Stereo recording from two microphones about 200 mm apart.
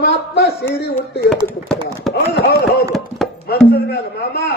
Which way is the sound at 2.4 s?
55° left (ahead or behind).